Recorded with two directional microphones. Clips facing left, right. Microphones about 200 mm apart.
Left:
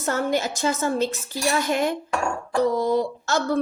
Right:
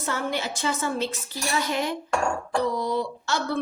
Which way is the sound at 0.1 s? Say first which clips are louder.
Left 5 dB; 45° left (ahead or behind).